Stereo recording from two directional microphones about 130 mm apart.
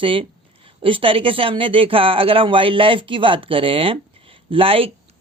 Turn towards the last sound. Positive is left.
turn(degrees=-45)  # may be behind; listen again after turning